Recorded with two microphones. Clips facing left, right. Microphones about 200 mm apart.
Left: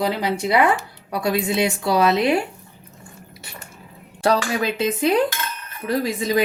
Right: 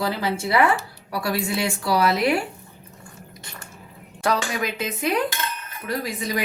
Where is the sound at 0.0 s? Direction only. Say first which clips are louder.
Left 3 dB; 20° left (ahead or behind).